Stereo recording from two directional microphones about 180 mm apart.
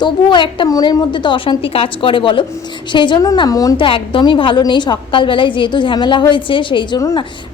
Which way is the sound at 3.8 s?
30° left (ahead or behind).